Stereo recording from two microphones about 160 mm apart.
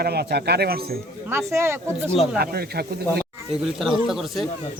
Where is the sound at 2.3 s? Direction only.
75° right (ahead or behind).